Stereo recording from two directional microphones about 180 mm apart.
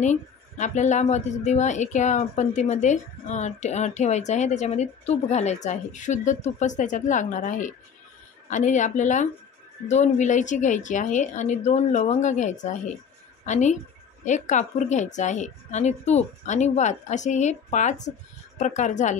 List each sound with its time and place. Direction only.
0.0 s a woman's voice: 40° left (ahead or behind)